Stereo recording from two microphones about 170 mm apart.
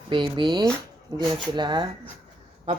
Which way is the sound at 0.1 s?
30° right (ahead or behind).